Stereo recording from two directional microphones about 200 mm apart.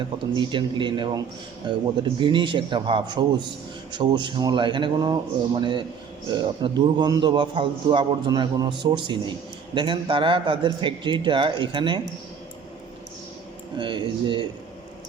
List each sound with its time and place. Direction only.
0.3 s a man's voice: 25° right (ahead or behind)
13.7 s a man's voice: 25° right (ahead or behind)